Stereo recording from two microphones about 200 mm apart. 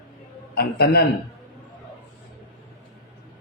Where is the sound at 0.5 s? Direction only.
55° left (ahead or behind).